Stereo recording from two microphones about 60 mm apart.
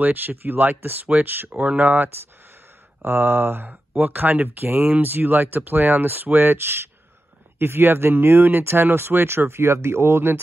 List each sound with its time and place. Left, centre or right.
0.0 s speech: right